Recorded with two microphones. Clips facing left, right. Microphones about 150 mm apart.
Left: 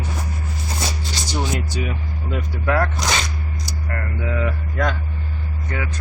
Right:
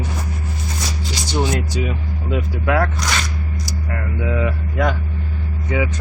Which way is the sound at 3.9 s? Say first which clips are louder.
Right 3 dB; 5° right (ahead or behind).